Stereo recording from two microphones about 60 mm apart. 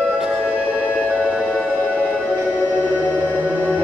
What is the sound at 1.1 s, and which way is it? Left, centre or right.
Music, right.